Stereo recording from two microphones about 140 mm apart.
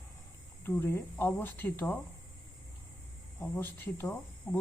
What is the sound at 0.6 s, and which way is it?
A woman's voice, 15° left (ahead or behind).